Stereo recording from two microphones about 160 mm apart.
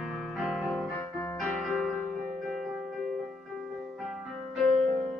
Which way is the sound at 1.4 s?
Centre (ahead or behind).